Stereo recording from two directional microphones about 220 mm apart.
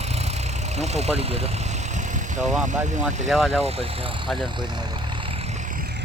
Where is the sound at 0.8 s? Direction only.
30° right (ahead or behind).